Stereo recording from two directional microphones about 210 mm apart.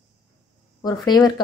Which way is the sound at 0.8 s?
20° left (ahead or behind).